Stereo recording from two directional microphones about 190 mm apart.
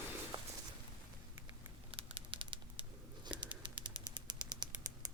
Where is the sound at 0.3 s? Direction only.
30° right (ahead or behind).